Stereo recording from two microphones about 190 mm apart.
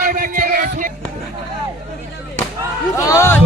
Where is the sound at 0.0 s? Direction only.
45° right (ahead or behind).